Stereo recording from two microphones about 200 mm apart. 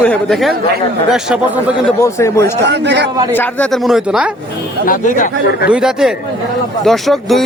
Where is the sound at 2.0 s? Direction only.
15° left (ahead or behind).